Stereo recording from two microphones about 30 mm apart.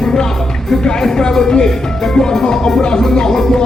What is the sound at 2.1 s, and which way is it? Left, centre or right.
Music, left.